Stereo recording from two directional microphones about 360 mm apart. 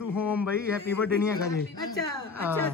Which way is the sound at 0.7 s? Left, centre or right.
Centre.